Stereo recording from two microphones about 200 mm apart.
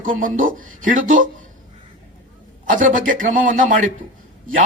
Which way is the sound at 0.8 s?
40° right (ahead or behind).